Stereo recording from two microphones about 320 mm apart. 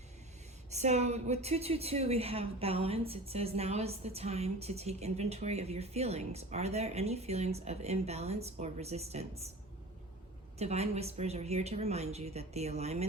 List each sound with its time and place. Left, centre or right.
0.7 s a woman's voice: right
10.6 s a woman's voice: centre